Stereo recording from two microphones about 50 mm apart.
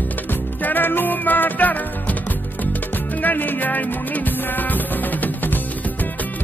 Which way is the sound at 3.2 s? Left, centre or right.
Left.